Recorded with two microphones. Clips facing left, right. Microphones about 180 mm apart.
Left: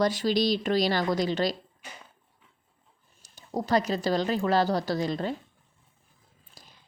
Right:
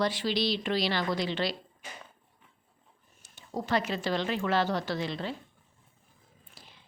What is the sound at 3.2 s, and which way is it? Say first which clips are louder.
A woman's voice: left 4 dB; 40° left (ahead or behind).